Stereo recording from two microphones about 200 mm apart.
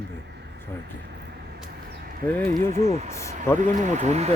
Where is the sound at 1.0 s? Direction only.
55° right (ahead or behind).